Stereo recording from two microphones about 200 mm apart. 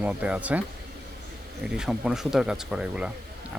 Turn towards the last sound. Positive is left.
turn(degrees=-5)  # may be behind; listen again after turning